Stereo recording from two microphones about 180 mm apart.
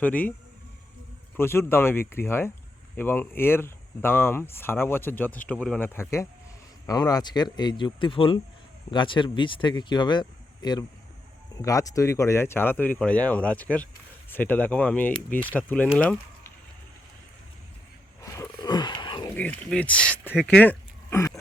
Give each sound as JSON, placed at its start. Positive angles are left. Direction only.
{"t": 0.0, "sound": "speech", "side_deg": 10}
{"t": 1.4, "sound": "speech", "side_deg": 15}
{"t": 18.2, "sound": "wild animals", "side_deg": 15}
{"t": 19.4, "sound": "speech", "side_deg": 10}